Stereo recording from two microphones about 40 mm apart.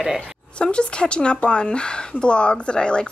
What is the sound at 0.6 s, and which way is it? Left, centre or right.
Speech, left.